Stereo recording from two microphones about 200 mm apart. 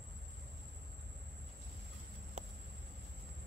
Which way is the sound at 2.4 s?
35° right (ahead or behind).